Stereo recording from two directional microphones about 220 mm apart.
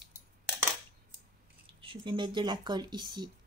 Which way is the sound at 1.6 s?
25° right (ahead or behind).